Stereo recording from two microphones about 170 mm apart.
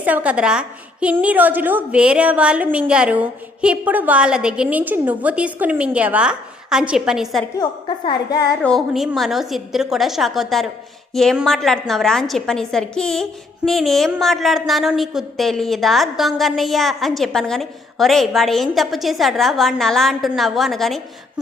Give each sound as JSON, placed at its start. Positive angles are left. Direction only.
{"t": 0.0, "sound": "a woman's voice", "side_deg": -10}
{"t": 7.6, "sound": "a woman's voice", "side_deg": 25}
{"t": 8.6, "sound": "a woman's voice", "side_deg": 0}